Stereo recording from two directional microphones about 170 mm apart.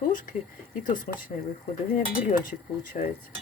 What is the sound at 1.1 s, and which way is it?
Speech, 45° left (ahead or behind).